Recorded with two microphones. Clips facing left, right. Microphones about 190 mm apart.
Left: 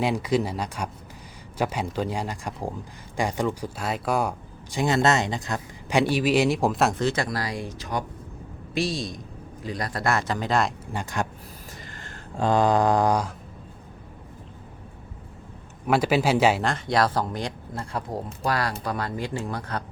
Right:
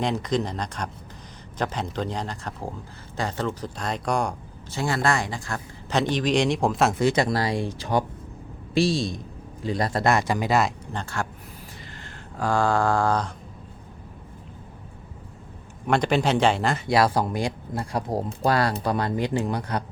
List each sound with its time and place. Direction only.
0.0 s speech: 10° left (ahead or behind)
4.7 s speech: 20° left (ahead or behind); by 6.9 s centre (ahead or behind)
7.0 s speech: 15° right (ahead or behind)
7.3 s a man's voice: 25° right (ahead or behind); by 10.7 s 10° right (ahead or behind)
10.9 s speech: 15° left (ahead or behind)
12.4 s mantra: 20° left (ahead or behind)
15.9 s speech: 5° left (ahead or behind); by 18.0 s 10° right (ahead or behind)
18.1 s speech: 30° right (ahead or behind)